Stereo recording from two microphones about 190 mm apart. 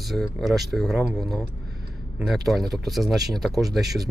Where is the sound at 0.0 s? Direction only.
Centre (ahead or behind).